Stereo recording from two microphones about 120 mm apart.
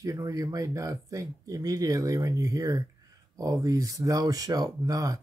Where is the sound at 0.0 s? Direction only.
30° right (ahead or behind).